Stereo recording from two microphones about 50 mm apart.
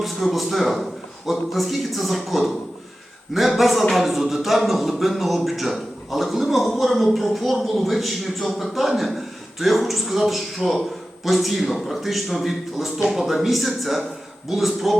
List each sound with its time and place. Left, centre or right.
0.0 s speech: centre
3.6 s speech: centre